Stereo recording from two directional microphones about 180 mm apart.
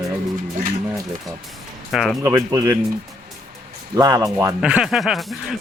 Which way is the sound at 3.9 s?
20° right (ahead or behind).